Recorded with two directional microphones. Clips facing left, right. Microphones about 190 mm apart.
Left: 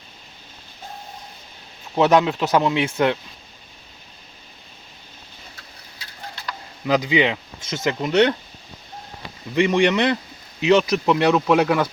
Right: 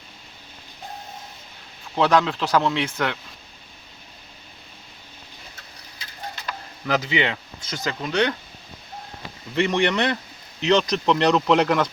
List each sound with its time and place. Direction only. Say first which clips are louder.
2.0 s speech: left 3 dB; 20° left (ahead or behind)
6.8 s speech: left 4 dB; 15° left (ahead or behind)
9.6 s speech: left 3 dB; 15° left (ahead or behind)